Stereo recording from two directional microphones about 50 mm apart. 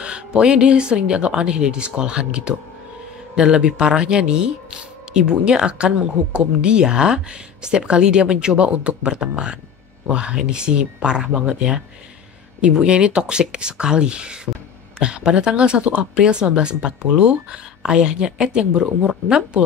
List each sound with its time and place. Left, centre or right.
0.0 s speech: right